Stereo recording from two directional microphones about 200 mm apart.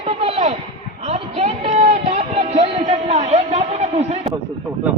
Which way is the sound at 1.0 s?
30° right (ahead or behind).